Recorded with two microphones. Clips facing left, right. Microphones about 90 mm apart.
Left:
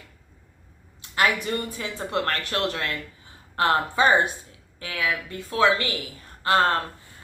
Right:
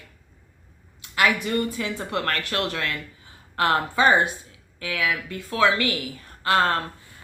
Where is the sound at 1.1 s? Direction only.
30° left (ahead or behind).